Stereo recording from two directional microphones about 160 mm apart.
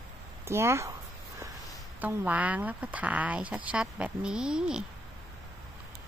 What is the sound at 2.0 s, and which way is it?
Speech, 10° right (ahead or behind).